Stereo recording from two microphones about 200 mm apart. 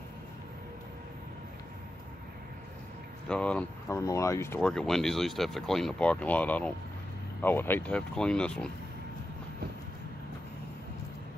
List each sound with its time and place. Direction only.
3.3 s speech: 5° left (ahead or behind)
4.6 s speech: 5° left (ahead or behind)